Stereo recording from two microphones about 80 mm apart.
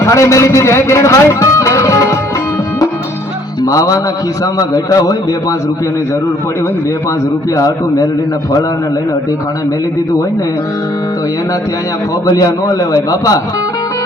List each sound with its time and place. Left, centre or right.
0.0 s a man's voice: left
3.6 s music: left
4.5 s a man's voice: left
7.5 s a man's voice: left
12.3 s a man's voice: left